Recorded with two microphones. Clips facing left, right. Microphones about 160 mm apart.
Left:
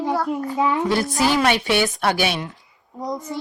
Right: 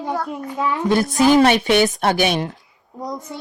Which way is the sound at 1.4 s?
20° right (ahead or behind).